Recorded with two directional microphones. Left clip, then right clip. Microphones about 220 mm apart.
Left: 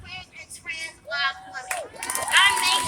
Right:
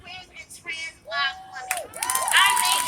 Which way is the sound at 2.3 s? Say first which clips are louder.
Left 1 dB; 20° left (ahead or behind).